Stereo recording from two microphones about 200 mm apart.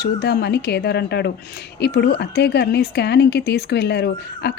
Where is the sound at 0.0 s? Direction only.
50° left (ahead or behind).